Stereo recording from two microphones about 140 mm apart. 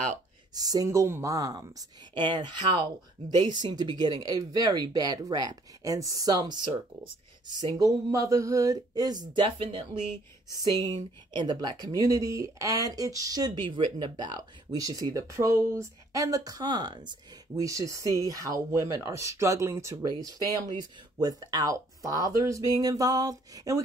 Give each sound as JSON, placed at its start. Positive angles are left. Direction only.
{"t": 0.6, "sound": "speech", "side_deg": -25}
{"t": 10.6, "sound": "speech", "side_deg": -25}